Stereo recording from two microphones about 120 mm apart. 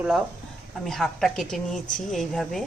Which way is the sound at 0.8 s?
Centre (ahead or behind).